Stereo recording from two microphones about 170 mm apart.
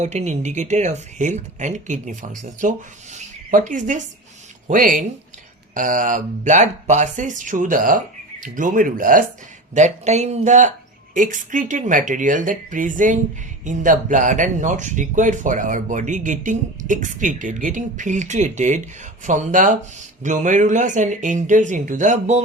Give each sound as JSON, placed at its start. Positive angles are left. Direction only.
{"t": 0.0, "sound": "speech", "side_deg": -40}
{"t": 9.7, "sound": "speech", "side_deg": -40}